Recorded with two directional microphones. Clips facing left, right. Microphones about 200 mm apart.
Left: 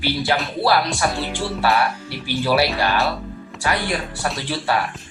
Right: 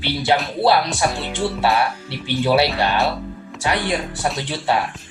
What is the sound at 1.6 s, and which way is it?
Speech, 25° right (ahead or behind).